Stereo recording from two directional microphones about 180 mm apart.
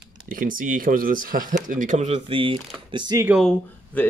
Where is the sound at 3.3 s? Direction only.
Centre (ahead or behind).